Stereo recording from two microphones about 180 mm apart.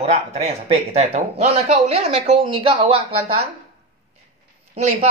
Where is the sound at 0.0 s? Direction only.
35° right (ahead or behind).